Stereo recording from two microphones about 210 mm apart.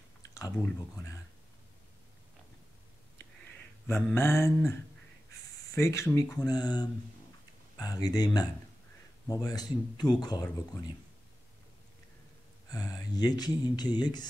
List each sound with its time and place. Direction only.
0.3 s speech: 15° left (ahead or behind)
3.8 s speech: 10° left (ahead or behind)
5.8 s speech: 15° left (ahead or behind)
12.6 s speech: 15° left (ahead or behind)